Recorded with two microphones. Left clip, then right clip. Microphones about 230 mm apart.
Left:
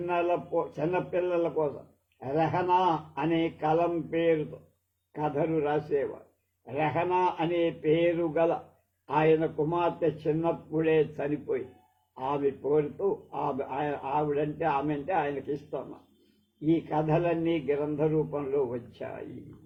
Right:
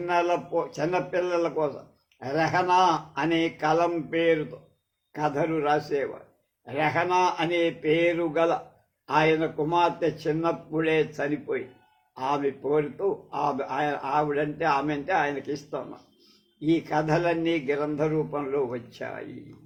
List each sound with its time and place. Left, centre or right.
0.0 s a man's voice: right
16.6 s a man's voice: right